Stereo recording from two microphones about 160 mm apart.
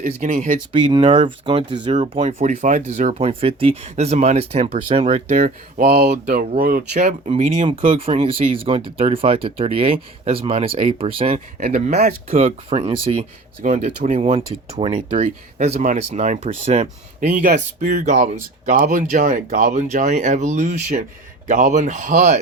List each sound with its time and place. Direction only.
0.2 s speech: 45° right (ahead or behind)
0.7 s speech: 30° right (ahead or behind)
2.2 s speech: 45° right (ahead or behind)
5.4 s speech: 60° right (ahead or behind)
7.0 s speech: 45° right (ahead or behind)
13.7 s speech: 45° right (ahead or behind)
15.5 s speech: 45° right (ahead or behind)
17.4 s speech: 60° right (ahead or behind)